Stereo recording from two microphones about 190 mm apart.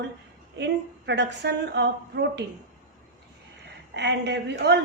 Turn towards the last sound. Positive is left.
turn(degrees=-65)  # may be behind; listen again after turning